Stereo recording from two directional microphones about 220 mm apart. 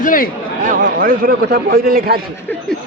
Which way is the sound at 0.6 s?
35° right (ahead or behind).